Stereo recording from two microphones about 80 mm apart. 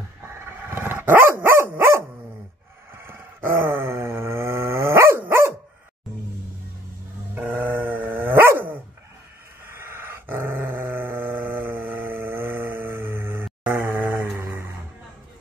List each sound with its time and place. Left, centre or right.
0.7 s dog: right
3.0 s groan: right
5.2 s dog: right
7.3 s dog: centre